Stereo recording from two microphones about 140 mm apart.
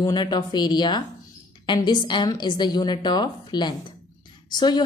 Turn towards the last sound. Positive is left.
turn(degrees=30)  # may be behind; listen again after turning